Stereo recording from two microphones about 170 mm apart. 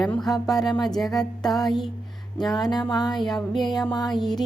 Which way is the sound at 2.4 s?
25° left (ahead or behind).